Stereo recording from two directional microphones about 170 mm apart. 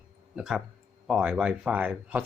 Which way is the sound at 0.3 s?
5° right (ahead or behind).